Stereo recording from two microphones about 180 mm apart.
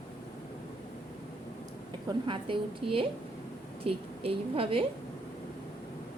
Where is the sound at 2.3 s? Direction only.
30° right (ahead or behind).